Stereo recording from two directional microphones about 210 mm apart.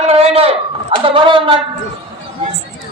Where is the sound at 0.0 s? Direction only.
30° right (ahead or behind).